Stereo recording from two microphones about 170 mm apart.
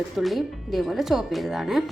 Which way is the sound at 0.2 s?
Centre (ahead or behind).